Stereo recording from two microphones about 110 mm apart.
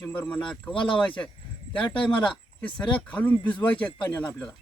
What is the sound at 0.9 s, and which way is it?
Speech, 10° left (ahead or behind).